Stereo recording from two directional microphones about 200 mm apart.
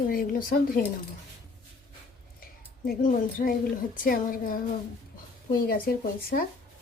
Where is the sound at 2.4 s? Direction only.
45° left (ahead or behind).